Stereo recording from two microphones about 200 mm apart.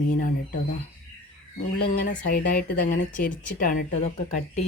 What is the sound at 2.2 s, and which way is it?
Speech, 45° left (ahead or behind).